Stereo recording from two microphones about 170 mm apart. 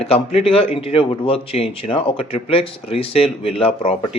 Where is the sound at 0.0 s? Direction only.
35° left (ahead or behind).